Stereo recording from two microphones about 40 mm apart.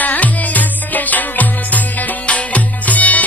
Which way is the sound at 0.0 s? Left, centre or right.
Left.